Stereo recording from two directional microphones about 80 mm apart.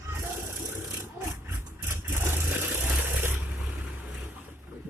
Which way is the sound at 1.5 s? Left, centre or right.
Right.